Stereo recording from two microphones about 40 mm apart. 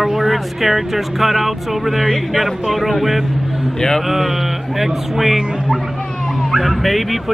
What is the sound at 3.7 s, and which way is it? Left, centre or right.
Speech, centre.